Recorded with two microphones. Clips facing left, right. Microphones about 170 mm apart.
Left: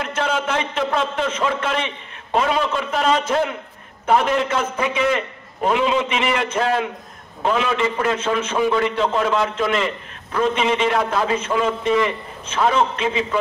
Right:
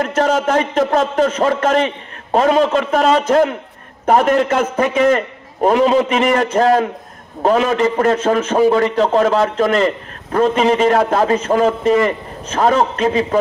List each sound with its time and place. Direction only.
0.0 s a man's voice: 40° right (ahead or behind)